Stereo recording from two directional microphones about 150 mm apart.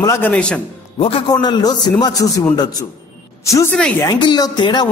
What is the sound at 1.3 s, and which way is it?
A woman's voice, 30° left (ahead or behind).